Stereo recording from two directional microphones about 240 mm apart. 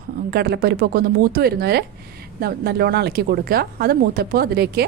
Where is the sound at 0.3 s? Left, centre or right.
Right.